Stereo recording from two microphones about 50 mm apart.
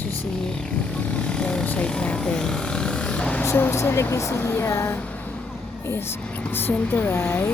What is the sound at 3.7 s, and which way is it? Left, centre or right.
Speech, left.